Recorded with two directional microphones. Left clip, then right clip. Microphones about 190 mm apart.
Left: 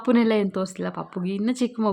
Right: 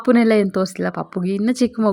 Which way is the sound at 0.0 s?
25° right (ahead or behind).